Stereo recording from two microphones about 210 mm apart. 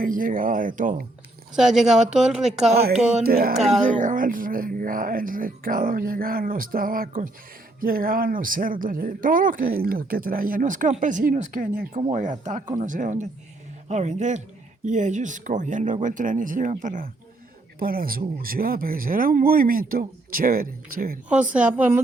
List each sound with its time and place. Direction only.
0.0 s speech: 40° right (ahead or behind)
1.5 s speech: centre (ahead or behind)
3.2 s speech: 45° right (ahead or behind)
21.5 s a woman's voice: 5° right (ahead or behind)